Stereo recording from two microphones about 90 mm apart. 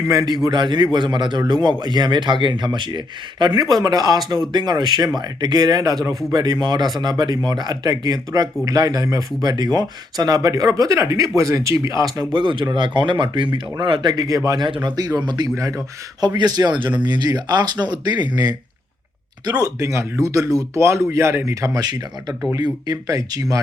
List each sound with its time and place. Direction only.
0.1 s speech: 40° right (ahead or behind)
0.4 s a man's voice: 55° right (ahead or behind)
12.3 s a man's voice: 65° right (ahead or behind); by 14.6 s 40° right (ahead or behind)
14.6 s a man's voice: 55° right (ahead or behind)
15.5 s speech: 35° right (ahead or behind)
16.2 s speech: 50° right (ahead or behind)
22.3 s speech: centre (ahead or behind)
22.5 s speech: 45° right (ahead or behind)